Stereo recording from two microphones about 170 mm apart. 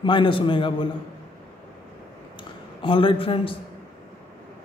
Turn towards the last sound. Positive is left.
turn(degrees=30)  # may be behind; listen again after turning